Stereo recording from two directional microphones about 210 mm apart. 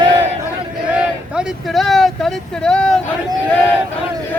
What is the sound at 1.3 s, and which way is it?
Speech, centre (ahead or behind).